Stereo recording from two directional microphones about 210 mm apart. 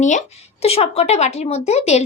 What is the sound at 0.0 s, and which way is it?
Speech, 35° left (ahead or behind).